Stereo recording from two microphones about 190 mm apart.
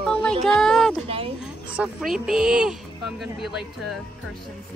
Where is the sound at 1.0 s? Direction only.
30° right (ahead or behind).